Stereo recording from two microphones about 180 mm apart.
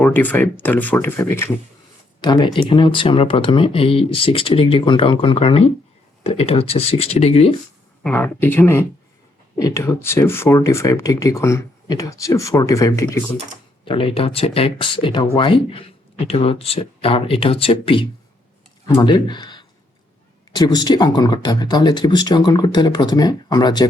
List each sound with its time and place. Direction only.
0.0 s speech: 10° left (ahead or behind)
2.2 s speech: 25° left (ahead or behind)
8.0 s speech: 10° left (ahead or behind)
13.8 s speech: 30° left (ahead or behind)